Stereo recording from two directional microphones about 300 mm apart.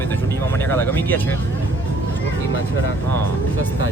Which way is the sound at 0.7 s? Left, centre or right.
Centre.